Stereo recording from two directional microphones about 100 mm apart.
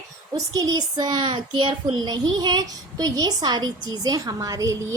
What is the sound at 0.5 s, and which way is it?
A child's voice, 40° right (ahead or behind).